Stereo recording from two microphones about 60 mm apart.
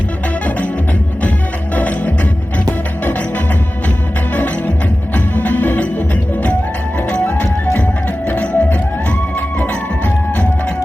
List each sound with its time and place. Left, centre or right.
1.7 s music: left
5.1 s music: left
7.3 s music: left